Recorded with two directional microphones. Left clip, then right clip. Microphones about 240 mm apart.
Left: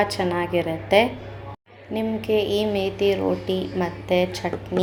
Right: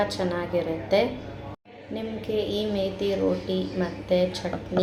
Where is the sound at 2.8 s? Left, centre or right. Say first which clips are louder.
Left 4 dB; left.